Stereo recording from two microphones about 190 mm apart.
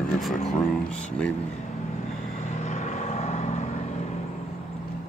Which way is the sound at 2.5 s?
40° left (ahead or behind).